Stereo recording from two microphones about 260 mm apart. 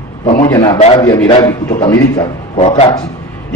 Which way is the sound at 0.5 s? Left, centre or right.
Centre.